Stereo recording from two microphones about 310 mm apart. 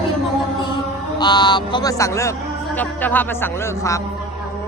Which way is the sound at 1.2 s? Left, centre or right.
Centre.